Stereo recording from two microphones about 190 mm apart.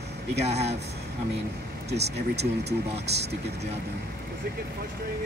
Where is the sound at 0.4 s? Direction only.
35° right (ahead or behind).